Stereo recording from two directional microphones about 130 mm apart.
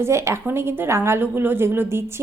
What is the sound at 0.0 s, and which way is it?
A woman's voice, 20° right (ahead or behind).